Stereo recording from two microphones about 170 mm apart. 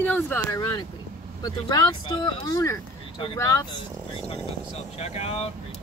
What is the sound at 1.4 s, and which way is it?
Speech, 20° left (ahead or behind).